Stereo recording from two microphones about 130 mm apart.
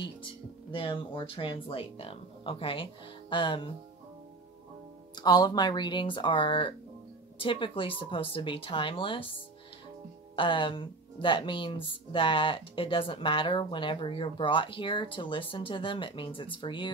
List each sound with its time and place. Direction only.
0.0 s speech: 40° left (ahead or behind)
5.1 s speech: 30° left (ahead or behind)
10.3 s speech: 40° left (ahead or behind)